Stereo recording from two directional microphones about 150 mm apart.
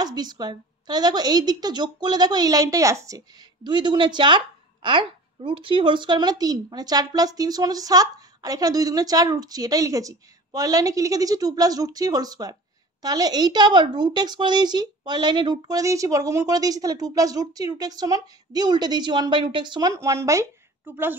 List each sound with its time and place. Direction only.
0.0 s speech: 30° right (ahead or behind)